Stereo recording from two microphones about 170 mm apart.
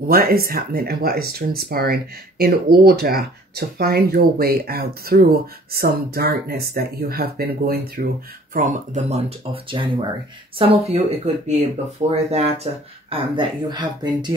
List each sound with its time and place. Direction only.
0.1 s speech: 60° right (ahead or behind)
8.5 s speech: 45° right (ahead or behind)
9.5 s speech: 30° right (ahead or behind)